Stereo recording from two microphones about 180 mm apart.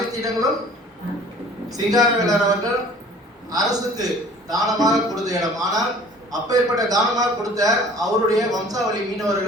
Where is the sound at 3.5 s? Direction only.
20° right (ahead or behind).